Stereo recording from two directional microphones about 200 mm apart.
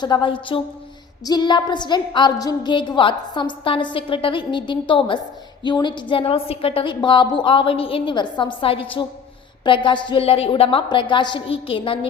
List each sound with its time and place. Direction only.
0.0 s a woman's voice: 25° left (ahead or behind)